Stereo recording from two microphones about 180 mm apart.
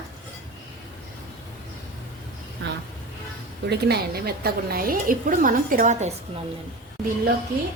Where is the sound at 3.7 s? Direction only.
65° right (ahead or behind); by 6.1 s 40° right (ahead or behind).